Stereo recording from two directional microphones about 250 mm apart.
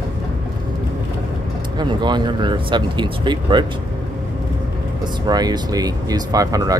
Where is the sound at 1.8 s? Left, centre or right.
Centre.